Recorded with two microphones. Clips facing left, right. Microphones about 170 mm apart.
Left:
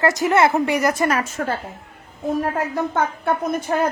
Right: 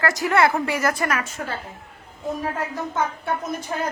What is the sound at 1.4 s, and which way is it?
A woman's voice, 50° left (ahead or behind).